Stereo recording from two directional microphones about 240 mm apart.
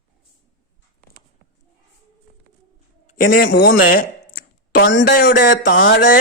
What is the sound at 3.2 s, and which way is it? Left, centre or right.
Speech, left.